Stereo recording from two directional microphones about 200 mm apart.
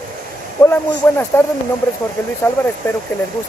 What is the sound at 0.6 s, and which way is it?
Speech, 10° left (ahead or behind).